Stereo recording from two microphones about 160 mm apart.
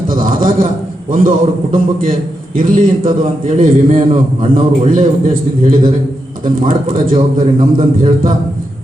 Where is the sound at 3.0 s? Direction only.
55° right (ahead or behind).